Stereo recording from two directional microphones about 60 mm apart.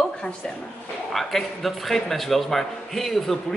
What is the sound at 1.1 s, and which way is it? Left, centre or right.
Speech, centre.